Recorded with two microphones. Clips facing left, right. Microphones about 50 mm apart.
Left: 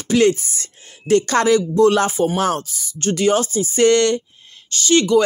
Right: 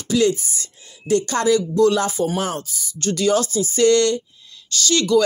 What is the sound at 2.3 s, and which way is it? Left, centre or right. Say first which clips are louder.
Speech: left 4 dB; left.